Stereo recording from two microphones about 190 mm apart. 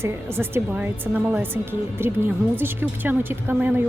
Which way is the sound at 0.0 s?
15° right (ahead or behind).